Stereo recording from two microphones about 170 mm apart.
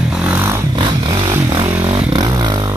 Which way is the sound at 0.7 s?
25° right (ahead or behind).